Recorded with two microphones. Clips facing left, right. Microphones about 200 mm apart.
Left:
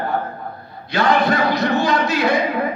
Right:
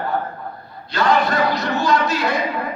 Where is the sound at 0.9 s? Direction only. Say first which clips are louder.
Left 1 dB; 55° left (ahead or behind).